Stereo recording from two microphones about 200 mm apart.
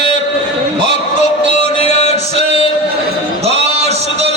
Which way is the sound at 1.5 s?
35° left (ahead or behind).